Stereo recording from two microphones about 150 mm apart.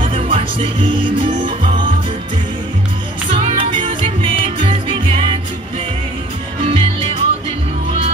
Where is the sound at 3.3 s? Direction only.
40° right (ahead or behind).